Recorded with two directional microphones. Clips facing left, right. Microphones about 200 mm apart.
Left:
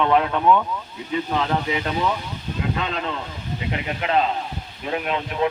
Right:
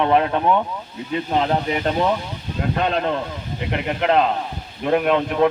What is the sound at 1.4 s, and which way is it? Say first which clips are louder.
A man's voice: right 3 dB; 40° right (ahead or behind).